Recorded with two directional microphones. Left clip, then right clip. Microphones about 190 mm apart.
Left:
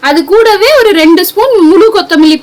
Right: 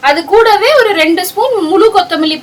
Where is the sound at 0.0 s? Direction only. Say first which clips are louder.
Left 2 dB; 40° left (ahead or behind).